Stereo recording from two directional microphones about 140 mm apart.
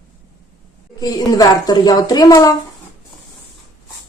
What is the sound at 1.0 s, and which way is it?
Speech, 25° left (ahead or behind).